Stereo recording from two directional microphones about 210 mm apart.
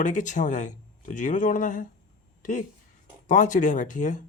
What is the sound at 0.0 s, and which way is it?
Speech, 35° left (ahead or behind).